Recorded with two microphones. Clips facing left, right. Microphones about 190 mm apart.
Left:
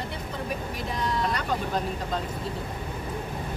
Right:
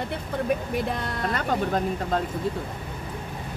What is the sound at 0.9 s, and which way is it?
Speech, 55° right (ahead or behind).